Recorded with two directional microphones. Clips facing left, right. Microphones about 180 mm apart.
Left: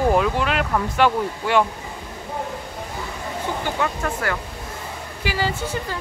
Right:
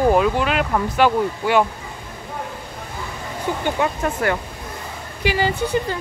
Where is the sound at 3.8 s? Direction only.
20° right (ahead or behind).